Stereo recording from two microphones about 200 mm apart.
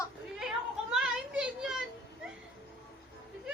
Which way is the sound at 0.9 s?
5° right (ahead or behind).